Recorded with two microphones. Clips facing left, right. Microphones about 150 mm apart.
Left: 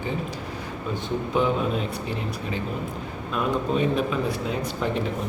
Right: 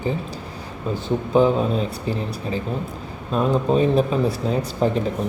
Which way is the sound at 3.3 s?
35° right (ahead or behind).